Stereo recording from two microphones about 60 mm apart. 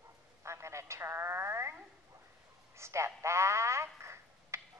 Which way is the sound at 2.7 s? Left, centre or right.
Right.